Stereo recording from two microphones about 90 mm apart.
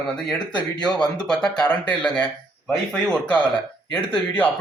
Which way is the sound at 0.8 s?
10° left (ahead or behind).